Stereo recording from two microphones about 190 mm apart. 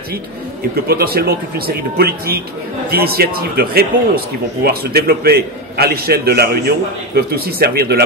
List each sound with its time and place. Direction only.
0.8 s a man's voice: 55° right (ahead or behind)